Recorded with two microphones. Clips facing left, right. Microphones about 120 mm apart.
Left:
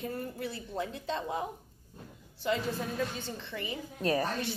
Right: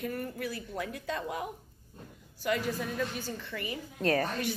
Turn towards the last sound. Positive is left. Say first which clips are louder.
# right 1 dB
turn(degrees=15)  # may be behind; listen again after turning